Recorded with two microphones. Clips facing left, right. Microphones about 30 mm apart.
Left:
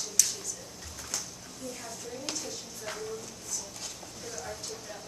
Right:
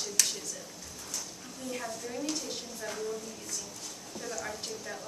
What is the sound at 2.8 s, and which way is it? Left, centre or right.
Speech, right.